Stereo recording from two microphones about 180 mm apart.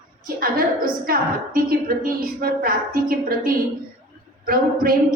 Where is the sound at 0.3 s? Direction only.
55° right (ahead or behind).